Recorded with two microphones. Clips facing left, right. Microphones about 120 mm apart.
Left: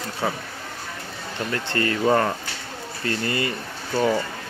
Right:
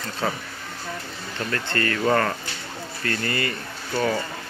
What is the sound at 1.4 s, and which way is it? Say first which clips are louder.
Speech: left 1 dB; 20° left (ahead or behind).